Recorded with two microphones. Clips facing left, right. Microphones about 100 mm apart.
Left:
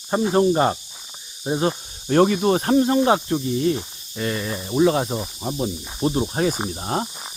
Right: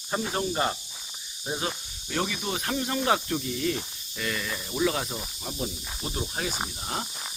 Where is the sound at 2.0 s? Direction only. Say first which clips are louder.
Left 14 dB; 50° left (ahead or behind).